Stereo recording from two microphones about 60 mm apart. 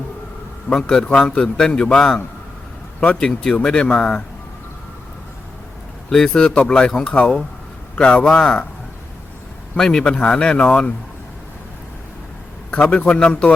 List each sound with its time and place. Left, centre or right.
0.7 s a man's voice: centre
6.1 s a man's voice: centre
9.7 s a man's voice: centre
12.7 s a man's voice: left